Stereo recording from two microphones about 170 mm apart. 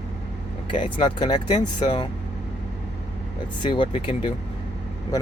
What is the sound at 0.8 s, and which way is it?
Speech, 25° left (ahead or behind).